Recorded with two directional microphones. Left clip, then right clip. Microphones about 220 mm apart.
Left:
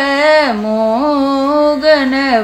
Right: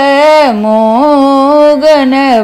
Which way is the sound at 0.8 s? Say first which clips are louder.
Right 6 dB; 30° right (ahead or behind).